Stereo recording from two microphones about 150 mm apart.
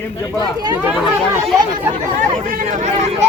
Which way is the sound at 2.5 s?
65° right (ahead or behind).